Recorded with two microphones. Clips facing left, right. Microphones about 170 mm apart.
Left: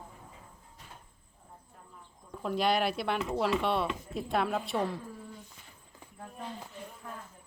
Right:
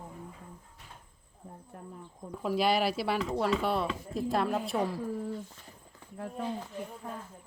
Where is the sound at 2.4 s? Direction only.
5° right (ahead or behind).